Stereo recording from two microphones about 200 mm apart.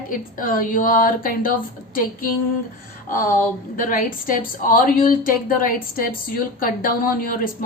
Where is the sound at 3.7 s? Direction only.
45° left (ahead or behind).